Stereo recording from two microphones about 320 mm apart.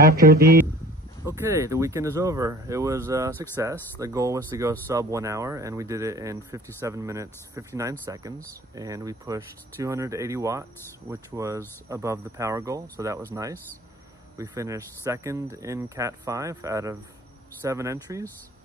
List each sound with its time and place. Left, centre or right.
0.0 s speech: right
1.2 s speech: centre